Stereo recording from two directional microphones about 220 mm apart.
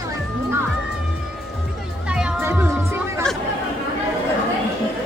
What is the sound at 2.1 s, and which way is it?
Music, 5° right (ahead or behind).